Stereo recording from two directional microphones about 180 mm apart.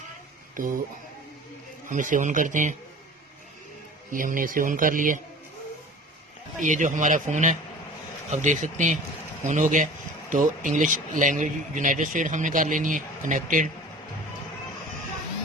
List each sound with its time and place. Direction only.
0.5 s speech: 50° right (ahead or behind)
1.9 s speech: 45° right (ahead or behind)
4.1 s speech: 50° right (ahead or behind)
6.6 s speech: 45° right (ahead or behind)